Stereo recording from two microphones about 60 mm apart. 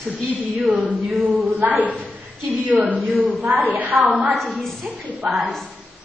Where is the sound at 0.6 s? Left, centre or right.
Right.